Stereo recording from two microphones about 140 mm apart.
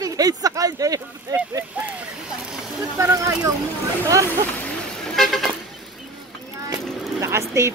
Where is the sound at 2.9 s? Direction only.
20° right (ahead or behind).